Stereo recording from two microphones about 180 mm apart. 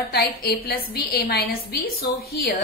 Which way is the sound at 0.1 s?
60° left (ahead or behind).